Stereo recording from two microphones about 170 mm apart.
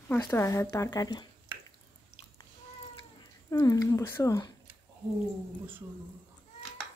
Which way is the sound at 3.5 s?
20° left (ahead or behind).